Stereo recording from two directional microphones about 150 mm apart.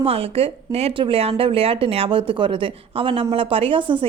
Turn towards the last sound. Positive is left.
turn(degrees=-35)  # may be behind; listen again after turning